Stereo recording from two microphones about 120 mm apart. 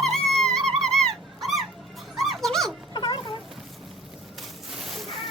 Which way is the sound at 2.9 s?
40° left (ahead or behind).